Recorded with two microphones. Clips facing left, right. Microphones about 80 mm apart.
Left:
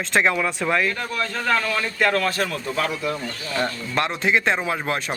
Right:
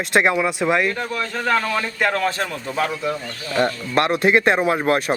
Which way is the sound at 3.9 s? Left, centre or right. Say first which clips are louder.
Right 5 dB; right.